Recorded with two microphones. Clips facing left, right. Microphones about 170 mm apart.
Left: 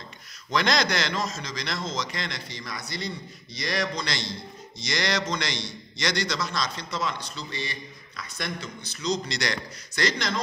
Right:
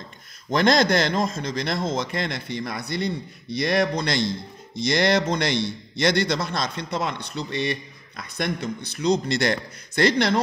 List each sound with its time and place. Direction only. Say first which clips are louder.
0.5 s a man's voice: right 6 dB; 50° right (ahead or behind)